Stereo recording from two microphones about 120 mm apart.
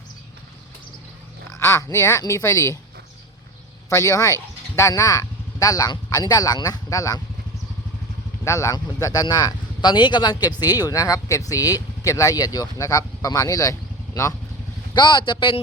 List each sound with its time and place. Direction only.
1.5 s speech: 25° left (ahead or behind)
3.8 s speech: 30° left (ahead or behind)
8.4 s speech: 25° left (ahead or behind)
14.9 s speech: 40° left (ahead or behind)